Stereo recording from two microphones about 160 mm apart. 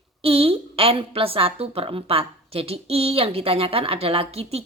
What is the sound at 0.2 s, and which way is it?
A woman's voice, 35° right (ahead or behind).